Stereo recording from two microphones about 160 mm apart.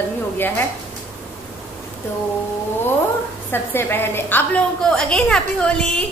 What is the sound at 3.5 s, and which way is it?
A woman's voice, 15° left (ahead or behind).